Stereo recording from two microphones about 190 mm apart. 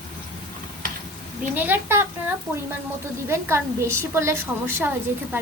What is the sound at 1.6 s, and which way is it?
Speech, 10° right (ahead or behind).